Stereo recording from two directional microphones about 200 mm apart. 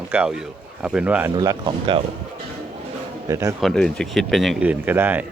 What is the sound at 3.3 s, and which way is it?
Speech, 15° right (ahead or behind).